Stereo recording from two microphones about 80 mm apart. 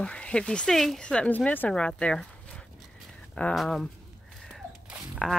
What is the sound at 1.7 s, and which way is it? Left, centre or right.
Speech, centre.